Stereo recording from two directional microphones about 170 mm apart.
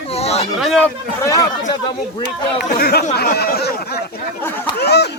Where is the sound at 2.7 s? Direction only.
65° left (ahead or behind).